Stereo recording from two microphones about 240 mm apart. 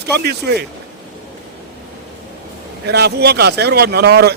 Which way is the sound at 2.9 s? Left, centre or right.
Right.